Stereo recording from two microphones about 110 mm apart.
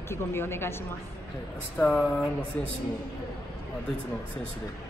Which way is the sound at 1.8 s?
10° left (ahead or behind).